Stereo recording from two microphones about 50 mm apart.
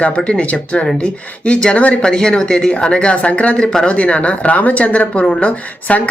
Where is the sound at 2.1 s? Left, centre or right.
Centre.